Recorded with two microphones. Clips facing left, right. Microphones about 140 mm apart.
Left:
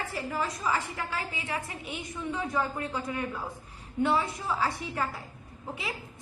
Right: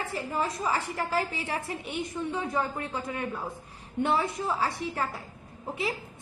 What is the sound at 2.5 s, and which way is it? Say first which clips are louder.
Speech: even; 25° right (ahead or behind).